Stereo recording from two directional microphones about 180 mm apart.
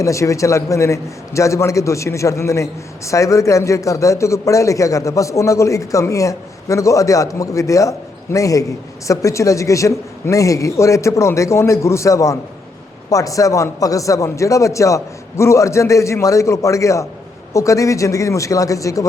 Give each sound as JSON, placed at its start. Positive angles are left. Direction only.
{"t": 0.0, "sound": "a man's voice", "side_deg": 15}